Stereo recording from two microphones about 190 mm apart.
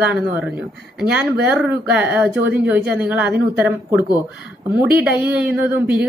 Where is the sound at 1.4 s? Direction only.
10° right (ahead or behind).